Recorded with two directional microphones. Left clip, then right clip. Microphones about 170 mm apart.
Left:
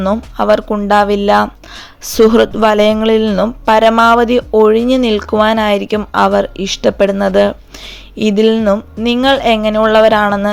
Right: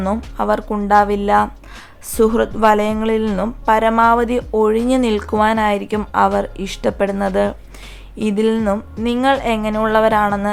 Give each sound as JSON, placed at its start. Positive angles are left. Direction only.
{"t": 0.3, "sound": "speech", "side_deg": 20}